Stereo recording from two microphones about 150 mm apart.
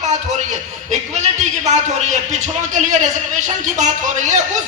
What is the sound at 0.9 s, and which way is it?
A man's voice, 50° right (ahead or behind).